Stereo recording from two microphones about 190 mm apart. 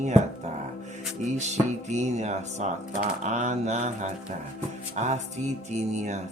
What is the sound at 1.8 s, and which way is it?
Speech, 35° right (ahead or behind).